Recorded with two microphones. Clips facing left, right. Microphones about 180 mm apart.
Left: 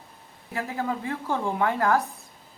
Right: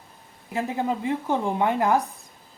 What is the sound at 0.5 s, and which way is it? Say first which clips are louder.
Speech: right 3 dB; 20° right (ahead or behind).